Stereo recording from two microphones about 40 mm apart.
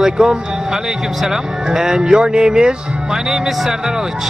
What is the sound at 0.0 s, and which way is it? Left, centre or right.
Speech, centre.